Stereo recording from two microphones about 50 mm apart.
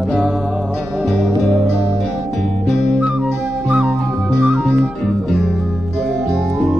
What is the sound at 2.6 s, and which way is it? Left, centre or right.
Music, centre.